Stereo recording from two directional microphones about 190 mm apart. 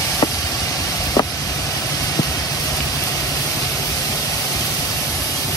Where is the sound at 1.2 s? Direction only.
20° left (ahead or behind).